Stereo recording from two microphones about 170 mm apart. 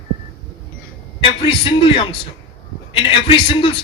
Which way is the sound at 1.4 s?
30° left (ahead or behind).